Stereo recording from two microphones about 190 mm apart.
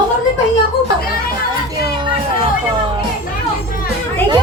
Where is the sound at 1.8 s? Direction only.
20° right (ahead or behind).